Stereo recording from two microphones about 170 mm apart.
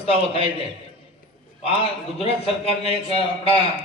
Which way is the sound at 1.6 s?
35° left (ahead or behind).